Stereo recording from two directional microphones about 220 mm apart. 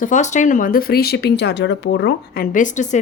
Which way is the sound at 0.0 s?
35° left (ahead or behind).